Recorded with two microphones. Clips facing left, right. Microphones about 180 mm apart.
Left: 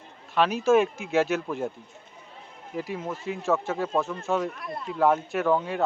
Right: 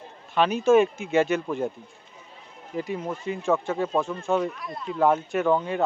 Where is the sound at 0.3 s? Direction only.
Centre (ahead or behind).